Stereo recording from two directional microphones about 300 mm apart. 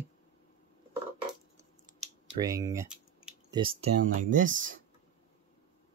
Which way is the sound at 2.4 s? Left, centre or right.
Centre.